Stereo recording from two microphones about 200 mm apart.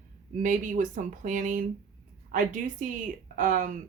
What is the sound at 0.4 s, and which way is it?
Speech, 40° right (ahead or behind).